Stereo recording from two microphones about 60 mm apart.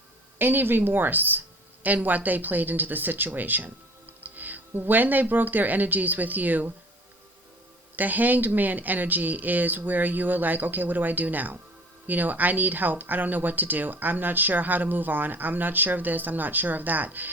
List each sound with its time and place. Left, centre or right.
0.3 s a woman's voice: right
7.9 s a woman's voice: right